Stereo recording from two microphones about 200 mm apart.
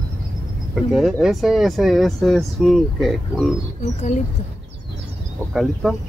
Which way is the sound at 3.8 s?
35° left (ahead or behind).